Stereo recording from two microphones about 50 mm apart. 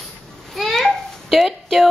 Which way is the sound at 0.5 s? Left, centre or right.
Centre.